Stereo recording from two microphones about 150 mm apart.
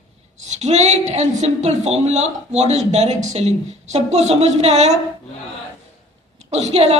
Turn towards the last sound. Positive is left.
turn(degrees=-45)  # may be behind; listen again after turning